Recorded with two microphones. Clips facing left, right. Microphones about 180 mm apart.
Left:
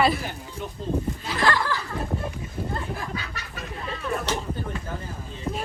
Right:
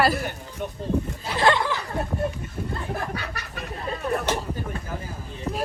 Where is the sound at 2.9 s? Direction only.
60° right (ahead or behind).